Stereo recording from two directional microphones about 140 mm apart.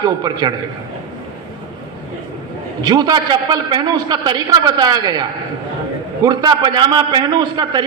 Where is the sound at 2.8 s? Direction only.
30° right (ahead or behind).